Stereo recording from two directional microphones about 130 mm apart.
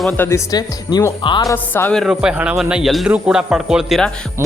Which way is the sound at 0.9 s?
35° left (ahead or behind).